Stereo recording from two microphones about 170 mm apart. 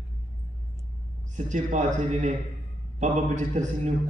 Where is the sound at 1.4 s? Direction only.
50° right (ahead or behind).